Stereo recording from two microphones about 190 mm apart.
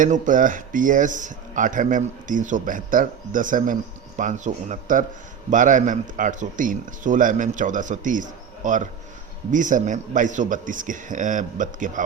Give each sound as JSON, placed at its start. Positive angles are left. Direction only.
{"t": 0.0, "sound": "a man's voice", "side_deg": -45}